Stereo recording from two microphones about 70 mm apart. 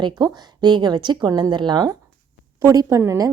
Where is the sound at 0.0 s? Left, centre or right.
Right.